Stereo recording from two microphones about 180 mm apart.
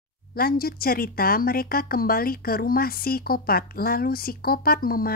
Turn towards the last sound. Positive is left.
turn(degrees=55)  # may be behind; listen again after turning